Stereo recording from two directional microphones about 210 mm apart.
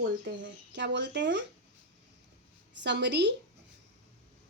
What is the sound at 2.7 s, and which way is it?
Speech, 55° right (ahead or behind).